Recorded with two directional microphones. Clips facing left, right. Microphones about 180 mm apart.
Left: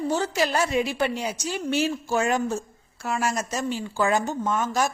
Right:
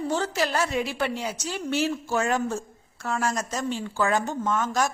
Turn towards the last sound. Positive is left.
turn(degrees=10)  # may be behind; listen again after turning